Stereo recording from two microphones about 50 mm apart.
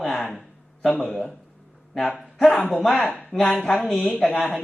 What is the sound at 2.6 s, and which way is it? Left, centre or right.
Speech, left.